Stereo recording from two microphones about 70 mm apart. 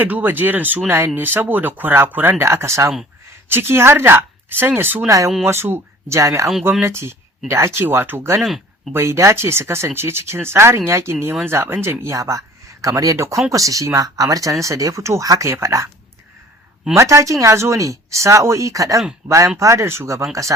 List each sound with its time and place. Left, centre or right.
0.0 s speech: right
0.9 s speech: right
5.0 s speech: right
5.5 s speech: right
6.1 s speech: right
8.4 s speech: centre
8.9 s speech: right
16.9 s speech: right